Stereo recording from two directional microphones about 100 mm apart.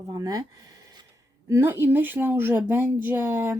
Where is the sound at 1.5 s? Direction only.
25° right (ahead or behind).